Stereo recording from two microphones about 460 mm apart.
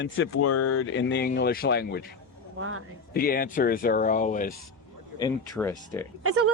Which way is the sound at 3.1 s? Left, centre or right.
Centre.